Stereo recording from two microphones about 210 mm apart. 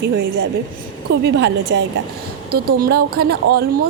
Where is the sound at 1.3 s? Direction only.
55° right (ahead or behind).